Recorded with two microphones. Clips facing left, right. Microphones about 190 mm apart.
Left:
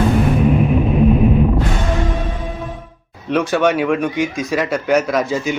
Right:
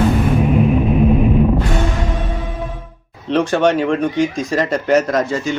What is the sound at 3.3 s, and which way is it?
Speech, 10° left (ahead or behind).